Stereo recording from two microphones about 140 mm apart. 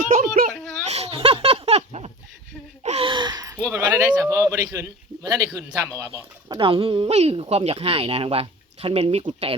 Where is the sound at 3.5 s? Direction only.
15° right (ahead or behind).